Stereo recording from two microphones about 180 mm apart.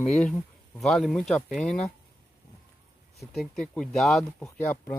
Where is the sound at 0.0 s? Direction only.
Centre (ahead or behind).